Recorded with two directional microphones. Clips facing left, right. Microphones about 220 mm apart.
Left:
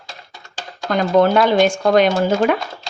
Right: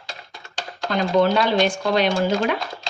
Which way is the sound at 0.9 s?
50° left (ahead or behind).